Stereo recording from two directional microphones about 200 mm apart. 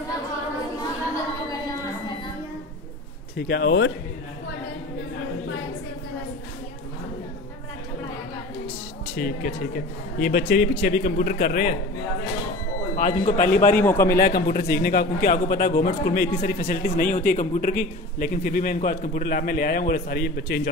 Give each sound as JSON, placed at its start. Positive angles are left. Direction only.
{"t": 3.3, "sound": "speech", "side_deg": 50}
{"t": 9.1, "sound": "a man's voice", "side_deg": 45}
{"t": 12.9, "sound": "speech", "side_deg": 40}
{"t": 13.7, "sound": "a man's voice", "side_deg": 10}
{"t": 14.1, "sound": "a man's voice", "side_deg": 50}